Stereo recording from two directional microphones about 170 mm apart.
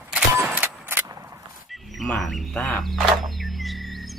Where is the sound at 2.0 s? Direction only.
Centre (ahead or behind).